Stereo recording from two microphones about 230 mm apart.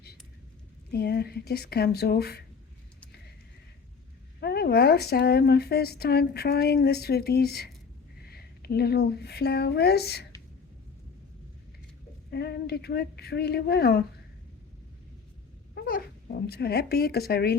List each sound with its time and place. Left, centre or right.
0.9 s speech: left
4.4 s speech: left
12.3 s speech: left
15.7 s speech: left